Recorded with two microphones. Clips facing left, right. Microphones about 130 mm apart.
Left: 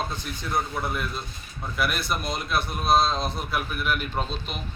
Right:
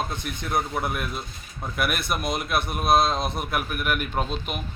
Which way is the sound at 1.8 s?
55° right (ahead or behind).